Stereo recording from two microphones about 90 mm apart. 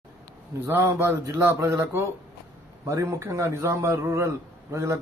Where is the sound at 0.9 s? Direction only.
30° right (ahead or behind).